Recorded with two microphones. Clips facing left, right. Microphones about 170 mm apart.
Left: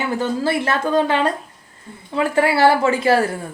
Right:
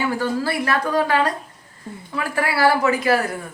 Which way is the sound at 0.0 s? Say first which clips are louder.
Left 1 dB; 25° left (ahead or behind).